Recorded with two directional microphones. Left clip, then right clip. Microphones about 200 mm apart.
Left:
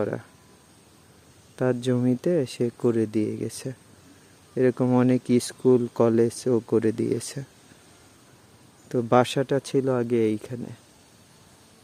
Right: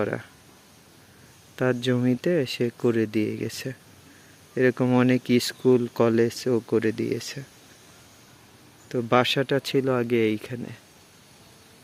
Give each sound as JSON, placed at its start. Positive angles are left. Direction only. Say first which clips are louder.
{"t": 0.0, "sound": "speech", "louder": "right 1 dB", "side_deg": 0}
{"t": 1.5, "sound": "speech", "louder": "even", "side_deg": 5}
{"t": 9.0, "sound": "speech", "louder": "left 1 dB", "side_deg": 15}